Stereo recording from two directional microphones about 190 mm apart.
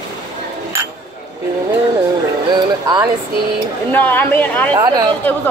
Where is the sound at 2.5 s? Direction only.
20° right (ahead or behind).